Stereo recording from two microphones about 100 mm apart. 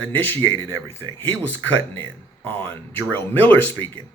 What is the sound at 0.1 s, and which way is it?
Speech, 20° left (ahead or behind).